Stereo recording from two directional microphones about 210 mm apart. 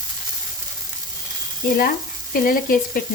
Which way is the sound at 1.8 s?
40° left (ahead or behind).